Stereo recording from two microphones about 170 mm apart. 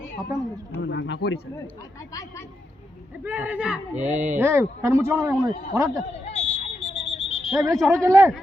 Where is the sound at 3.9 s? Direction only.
45° right (ahead or behind).